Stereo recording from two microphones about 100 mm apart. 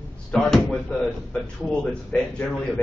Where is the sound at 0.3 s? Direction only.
5° left (ahead or behind).